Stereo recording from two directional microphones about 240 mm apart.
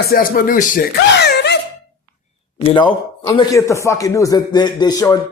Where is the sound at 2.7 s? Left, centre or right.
Centre.